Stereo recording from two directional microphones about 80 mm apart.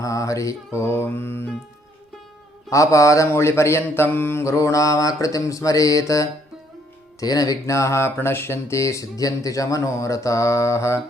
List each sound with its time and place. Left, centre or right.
0.0 s speech: left
2.6 s speech: left